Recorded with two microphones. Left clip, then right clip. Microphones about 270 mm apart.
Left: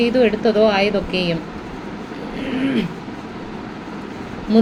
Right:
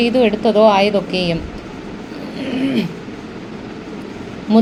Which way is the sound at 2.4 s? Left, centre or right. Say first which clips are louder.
Right 2 dB; centre.